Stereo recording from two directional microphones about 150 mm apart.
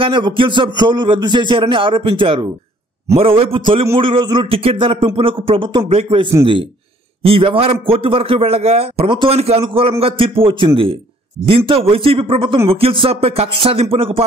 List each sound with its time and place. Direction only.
0.0 s a man's voice: 35° right (ahead or behind)
7.2 s a man's voice: 40° right (ahead or behind)